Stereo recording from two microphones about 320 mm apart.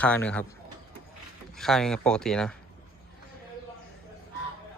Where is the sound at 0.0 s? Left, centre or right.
Centre.